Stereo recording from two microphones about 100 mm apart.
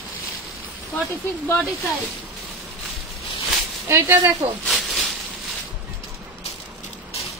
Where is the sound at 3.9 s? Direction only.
30° right (ahead or behind).